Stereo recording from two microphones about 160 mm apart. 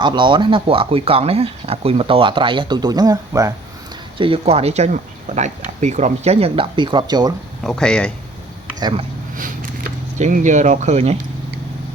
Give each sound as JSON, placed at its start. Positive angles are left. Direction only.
{"t": 0.0, "sound": "speech", "side_deg": -30}
{"t": 4.2, "sound": "speech", "side_deg": -35}
{"t": 7.6, "sound": "speech", "side_deg": 5}
{"t": 8.8, "sound": "speech", "side_deg": -35}
{"t": 10.2, "sound": "speech", "side_deg": -50}